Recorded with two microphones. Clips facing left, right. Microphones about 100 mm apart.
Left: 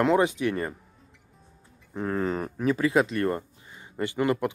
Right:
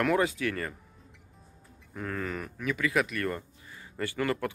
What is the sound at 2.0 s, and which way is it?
Speech, 30° left (ahead or behind).